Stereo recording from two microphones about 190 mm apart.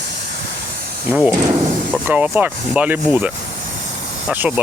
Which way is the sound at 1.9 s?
5° right (ahead or behind).